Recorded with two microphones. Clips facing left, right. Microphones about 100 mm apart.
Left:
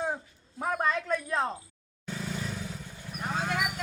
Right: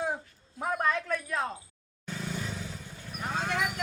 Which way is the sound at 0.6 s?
5° left (ahead or behind).